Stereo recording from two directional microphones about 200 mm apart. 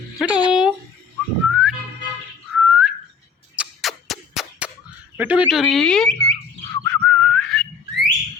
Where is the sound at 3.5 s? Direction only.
Centre (ahead or behind).